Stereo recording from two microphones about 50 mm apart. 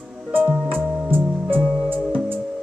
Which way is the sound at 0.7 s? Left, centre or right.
Right.